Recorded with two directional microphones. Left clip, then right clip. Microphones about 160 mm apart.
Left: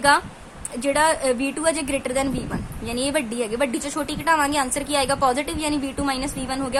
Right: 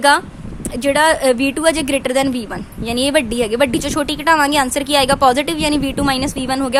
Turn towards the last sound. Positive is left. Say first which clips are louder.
# right 8 dB
turn(degrees=-50)  # may be behind; listen again after turning